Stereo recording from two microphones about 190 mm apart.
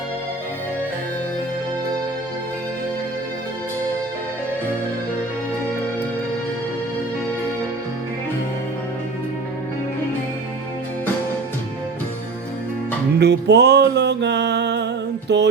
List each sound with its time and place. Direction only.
13.1 s music: 60° right (ahead or behind)